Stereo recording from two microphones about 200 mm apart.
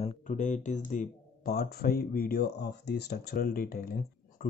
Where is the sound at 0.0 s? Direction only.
35° left (ahead or behind).